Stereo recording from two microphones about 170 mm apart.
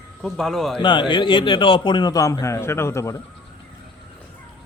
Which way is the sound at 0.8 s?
30° left (ahead or behind).